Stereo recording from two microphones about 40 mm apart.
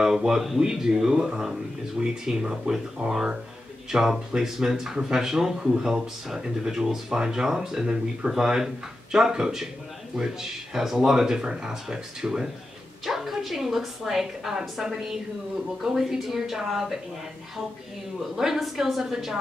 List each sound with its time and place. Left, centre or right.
0.0 s speech: centre
18.3 s speech: centre